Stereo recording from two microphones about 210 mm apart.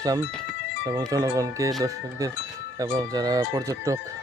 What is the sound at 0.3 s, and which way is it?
Speech, centre (ahead or behind).